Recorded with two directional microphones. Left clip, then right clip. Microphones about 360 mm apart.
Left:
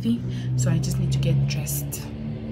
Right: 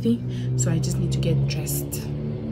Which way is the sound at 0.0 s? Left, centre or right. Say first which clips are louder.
Right 2 dB; centre.